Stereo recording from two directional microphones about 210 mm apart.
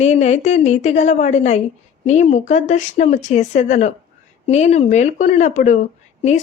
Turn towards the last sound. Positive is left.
turn(degrees=35)  # may be behind; listen again after turning